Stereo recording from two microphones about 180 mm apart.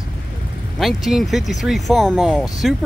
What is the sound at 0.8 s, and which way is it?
Speech, centre (ahead or behind).